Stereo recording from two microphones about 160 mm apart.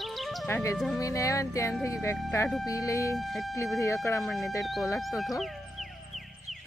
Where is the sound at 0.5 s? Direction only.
15° left (ahead or behind).